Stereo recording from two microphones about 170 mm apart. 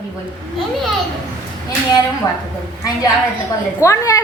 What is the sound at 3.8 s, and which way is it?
Speech, 15° left (ahead or behind).